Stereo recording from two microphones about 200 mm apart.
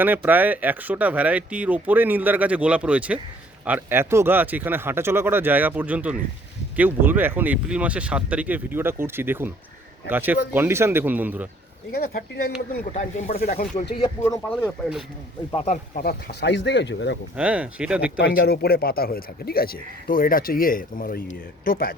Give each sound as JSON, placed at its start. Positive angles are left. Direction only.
{"t": 0.0, "sound": "speech", "side_deg": -10}
{"t": 11.9, "sound": "speech", "side_deg": 50}
{"t": 12.8, "sound": "speech", "side_deg": 35}
{"t": 14.2, "sound": "speech", "side_deg": 10}
{"t": 15.5, "sound": "speech", "side_deg": 35}
{"t": 16.0, "sound": "speech", "side_deg": 50}
{"t": 17.3, "sound": "speech", "side_deg": -5}
{"t": 18.3, "sound": "speech", "side_deg": 50}